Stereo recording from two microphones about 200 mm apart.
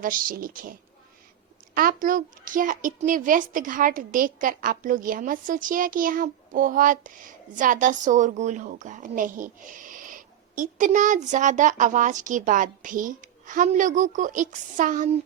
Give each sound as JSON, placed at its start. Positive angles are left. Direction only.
{"t": 0.0, "sound": "a child's voice", "side_deg": -45}